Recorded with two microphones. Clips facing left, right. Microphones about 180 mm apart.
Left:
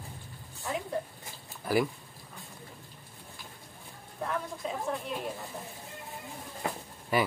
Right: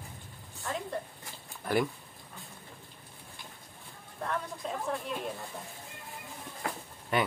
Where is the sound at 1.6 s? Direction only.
5° left (ahead or behind).